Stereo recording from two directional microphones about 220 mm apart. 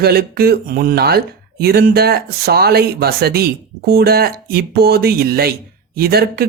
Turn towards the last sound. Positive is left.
turn(degrees=-45)  # may be behind; listen again after turning